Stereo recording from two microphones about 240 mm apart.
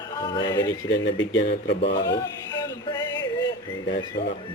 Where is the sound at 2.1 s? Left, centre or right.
Centre.